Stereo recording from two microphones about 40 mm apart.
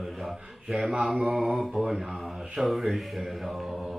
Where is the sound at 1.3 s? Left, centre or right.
Centre.